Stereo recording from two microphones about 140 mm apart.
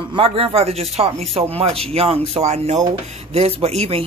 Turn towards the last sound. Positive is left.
turn(degrees=-45)  # may be behind; listen again after turning